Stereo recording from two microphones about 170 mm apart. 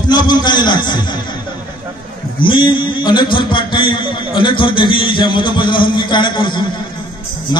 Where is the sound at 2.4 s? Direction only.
30° left (ahead or behind).